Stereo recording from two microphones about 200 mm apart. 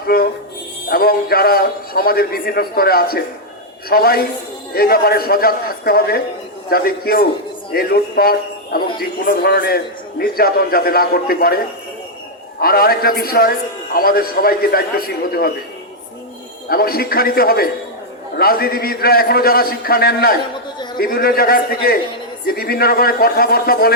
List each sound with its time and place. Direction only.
0.9 s a man's voice: 50° left (ahead or behind)
12.6 s a man's voice: 50° left (ahead or behind)
16.6 s a man's voice: 50° left (ahead or behind)